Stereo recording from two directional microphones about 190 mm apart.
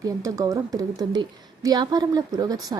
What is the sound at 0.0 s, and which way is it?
A woman's voice, 15° right (ahead or behind).